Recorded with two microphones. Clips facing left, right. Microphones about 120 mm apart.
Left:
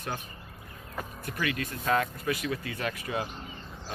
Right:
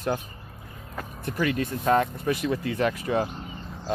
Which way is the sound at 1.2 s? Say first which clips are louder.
Right 7 dB; 30° right (ahead or behind).